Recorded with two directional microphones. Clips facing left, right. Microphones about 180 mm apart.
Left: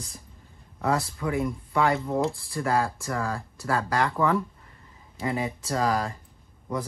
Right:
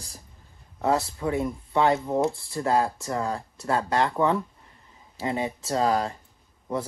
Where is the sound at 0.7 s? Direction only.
25° right (ahead or behind).